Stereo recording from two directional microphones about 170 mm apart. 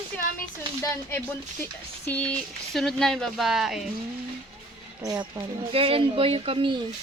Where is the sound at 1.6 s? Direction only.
10° left (ahead or behind).